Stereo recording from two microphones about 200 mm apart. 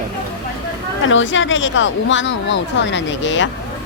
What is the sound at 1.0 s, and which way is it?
Speech, 70° left (ahead or behind).